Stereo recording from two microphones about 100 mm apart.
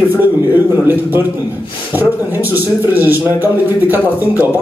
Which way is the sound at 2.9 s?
20° right (ahead or behind).